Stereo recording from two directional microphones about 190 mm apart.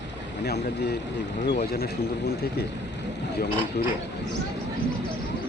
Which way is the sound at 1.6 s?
55° left (ahead or behind).